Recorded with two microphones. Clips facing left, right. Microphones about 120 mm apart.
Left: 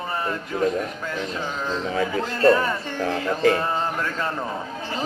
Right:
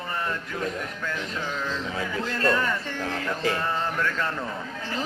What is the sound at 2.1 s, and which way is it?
Speech, 20° left (ahead or behind).